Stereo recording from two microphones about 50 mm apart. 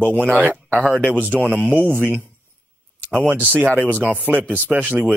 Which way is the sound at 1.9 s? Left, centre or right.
Right.